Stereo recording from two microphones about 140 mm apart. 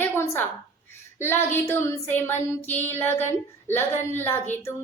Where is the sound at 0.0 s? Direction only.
15° left (ahead or behind).